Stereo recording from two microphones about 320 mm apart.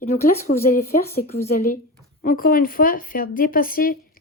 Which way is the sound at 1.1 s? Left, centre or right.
Left.